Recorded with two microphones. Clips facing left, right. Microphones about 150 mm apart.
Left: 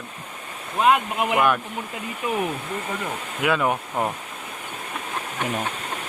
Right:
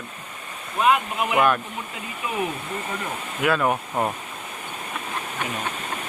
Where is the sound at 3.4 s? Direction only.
10° left (ahead or behind).